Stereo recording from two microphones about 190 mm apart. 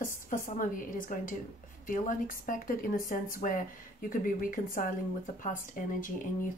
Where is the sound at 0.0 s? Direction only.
45° left (ahead or behind).